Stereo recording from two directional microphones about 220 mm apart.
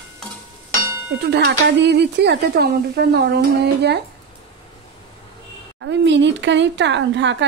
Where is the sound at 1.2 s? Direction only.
50° right (ahead or behind).